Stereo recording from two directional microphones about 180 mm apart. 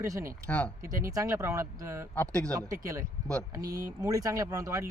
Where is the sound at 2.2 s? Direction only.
10° left (ahead or behind).